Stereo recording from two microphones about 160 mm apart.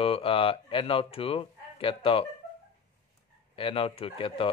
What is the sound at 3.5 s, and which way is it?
Speech, 35° left (ahead or behind).